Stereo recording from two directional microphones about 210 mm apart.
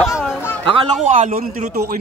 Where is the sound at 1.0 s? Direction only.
35° right (ahead or behind).